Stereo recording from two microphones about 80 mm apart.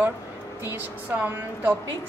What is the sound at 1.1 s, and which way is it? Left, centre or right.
Speech, right.